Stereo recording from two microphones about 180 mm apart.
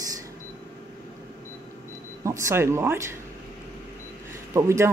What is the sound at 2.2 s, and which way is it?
Speech, 15° right (ahead or behind).